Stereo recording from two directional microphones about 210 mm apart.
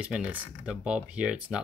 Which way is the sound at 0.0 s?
5° right (ahead or behind).